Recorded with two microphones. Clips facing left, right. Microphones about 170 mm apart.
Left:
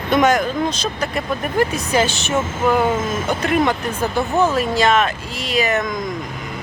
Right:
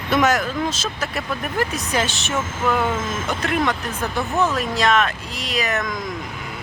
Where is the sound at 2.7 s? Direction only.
30° left (ahead or behind).